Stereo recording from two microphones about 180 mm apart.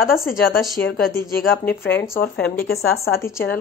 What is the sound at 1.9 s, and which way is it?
Speech, 10° left (ahead or behind).